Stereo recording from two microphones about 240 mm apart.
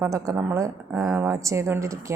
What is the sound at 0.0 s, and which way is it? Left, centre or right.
A woman's voice, centre.